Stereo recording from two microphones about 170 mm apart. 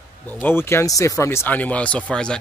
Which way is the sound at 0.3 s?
10° left (ahead or behind).